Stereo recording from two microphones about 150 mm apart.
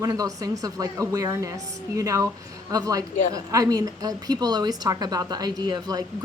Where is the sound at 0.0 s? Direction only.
25° right (ahead or behind).